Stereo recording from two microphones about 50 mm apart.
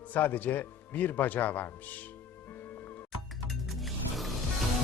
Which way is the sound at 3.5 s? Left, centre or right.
Centre.